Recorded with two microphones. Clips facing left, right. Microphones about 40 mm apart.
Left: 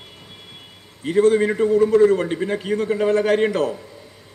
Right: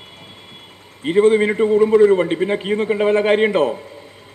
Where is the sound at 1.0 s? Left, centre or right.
Right.